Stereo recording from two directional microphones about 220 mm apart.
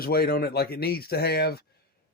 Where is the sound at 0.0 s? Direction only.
45° left (ahead or behind).